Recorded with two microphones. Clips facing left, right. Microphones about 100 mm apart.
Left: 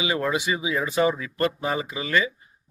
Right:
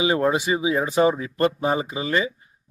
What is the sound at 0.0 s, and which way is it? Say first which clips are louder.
A man's voice: right 4 dB; 35° right (ahead or behind).